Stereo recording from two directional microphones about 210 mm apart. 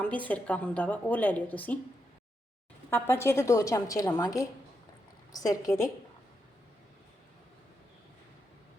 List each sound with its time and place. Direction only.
0.0 s a woman's voice: 5° left (ahead or behind)
2.9 s a woman's voice: 10° left (ahead or behind)